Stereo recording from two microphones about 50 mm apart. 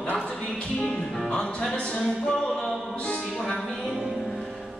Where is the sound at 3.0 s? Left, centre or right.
Centre.